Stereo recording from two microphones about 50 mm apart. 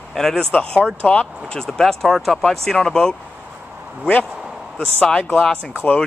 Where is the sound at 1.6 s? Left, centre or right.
Centre.